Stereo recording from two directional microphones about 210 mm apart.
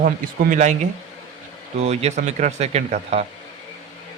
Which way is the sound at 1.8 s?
30° right (ahead or behind).